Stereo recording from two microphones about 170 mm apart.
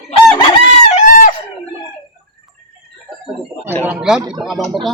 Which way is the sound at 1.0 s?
50° left (ahead or behind).